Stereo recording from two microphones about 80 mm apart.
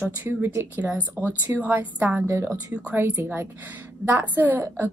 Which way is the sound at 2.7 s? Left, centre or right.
Centre.